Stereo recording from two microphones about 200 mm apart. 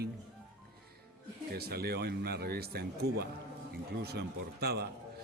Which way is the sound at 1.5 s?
50° right (ahead or behind).